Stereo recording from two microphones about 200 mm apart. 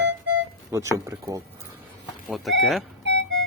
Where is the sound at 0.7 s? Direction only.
15° right (ahead or behind).